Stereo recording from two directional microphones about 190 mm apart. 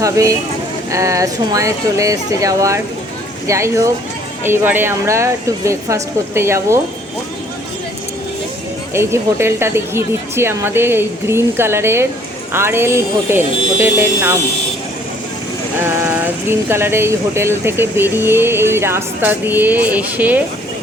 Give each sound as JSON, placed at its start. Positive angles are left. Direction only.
{"t": 0.0, "sound": "speech", "side_deg": -15}
{"t": 8.9, "sound": "speech", "side_deg": -15}
{"t": 15.8, "sound": "speech", "side_deg": -15}